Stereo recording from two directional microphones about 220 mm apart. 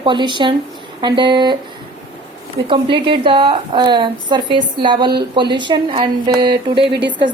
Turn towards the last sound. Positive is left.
turn(degrees=-20)  # may be behind; listen again after turning